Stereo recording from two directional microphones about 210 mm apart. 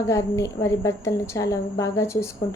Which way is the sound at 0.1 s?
15° left (ahead or behind).